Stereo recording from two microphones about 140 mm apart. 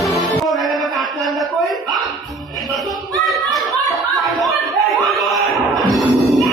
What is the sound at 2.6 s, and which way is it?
Music, centre (ahead or behind).